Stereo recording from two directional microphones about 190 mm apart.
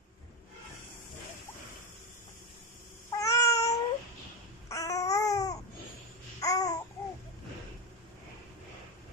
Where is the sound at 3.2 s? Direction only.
15° left (ahead or behind).